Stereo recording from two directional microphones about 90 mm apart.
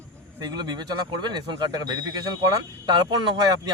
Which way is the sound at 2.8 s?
60° right (ahead or behind).